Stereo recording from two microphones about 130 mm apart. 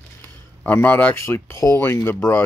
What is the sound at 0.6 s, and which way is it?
Speech, 15° left (ahead or behind).